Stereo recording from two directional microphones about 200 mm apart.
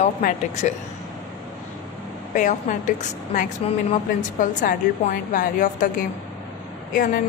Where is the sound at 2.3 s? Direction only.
40° left (ahead or behind).